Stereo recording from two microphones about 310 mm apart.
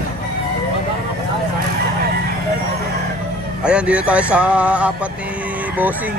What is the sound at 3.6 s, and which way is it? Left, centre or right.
Speech, centre.